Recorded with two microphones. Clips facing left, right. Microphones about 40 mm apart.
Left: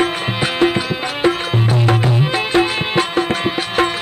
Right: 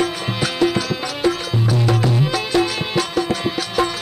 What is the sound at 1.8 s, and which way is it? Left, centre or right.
Music, left.